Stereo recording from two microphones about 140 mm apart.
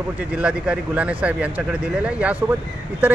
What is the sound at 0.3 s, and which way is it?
Speech, 10° right (ahead or behind).